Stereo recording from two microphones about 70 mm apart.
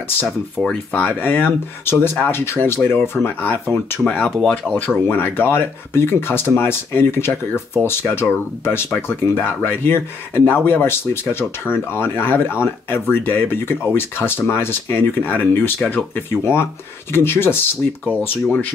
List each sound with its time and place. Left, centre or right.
0.6 s speech: centre
0.9 s speech: left
4.0 s speech: centre
4.4 s speech: centre
5.0 s speech: left